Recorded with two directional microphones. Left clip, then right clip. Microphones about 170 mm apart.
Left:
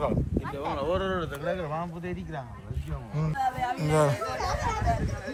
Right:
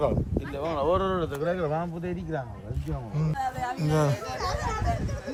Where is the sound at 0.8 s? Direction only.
65° right (ahead or behind).